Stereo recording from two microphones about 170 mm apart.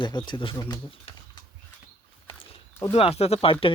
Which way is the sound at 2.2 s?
35° left (ahead or behind).